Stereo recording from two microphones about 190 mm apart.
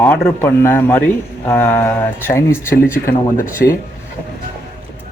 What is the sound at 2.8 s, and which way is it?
Speech, 50° left (ahead or behind).